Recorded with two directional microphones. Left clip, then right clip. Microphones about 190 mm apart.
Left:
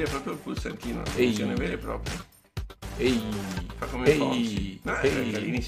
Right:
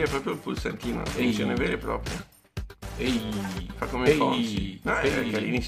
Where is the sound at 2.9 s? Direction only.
Centre (ahead or behind).